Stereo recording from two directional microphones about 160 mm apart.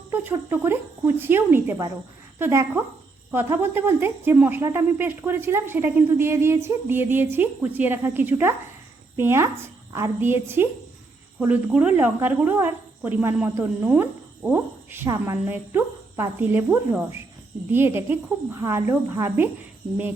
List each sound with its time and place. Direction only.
0.1 s a woman's voice: 15° right (ahead or behind)